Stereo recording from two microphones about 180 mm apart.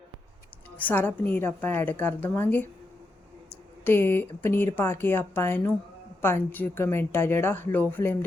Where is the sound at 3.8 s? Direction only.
10° left (ahead or behind).